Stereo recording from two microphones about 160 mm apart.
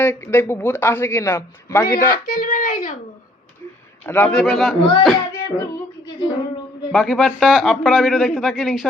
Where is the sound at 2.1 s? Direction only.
65° left (ahead or behind).